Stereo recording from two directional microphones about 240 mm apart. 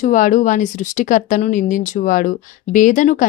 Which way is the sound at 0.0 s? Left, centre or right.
Left.